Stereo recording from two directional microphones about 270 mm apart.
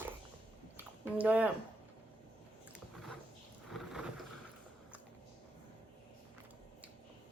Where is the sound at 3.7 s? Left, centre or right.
Centre.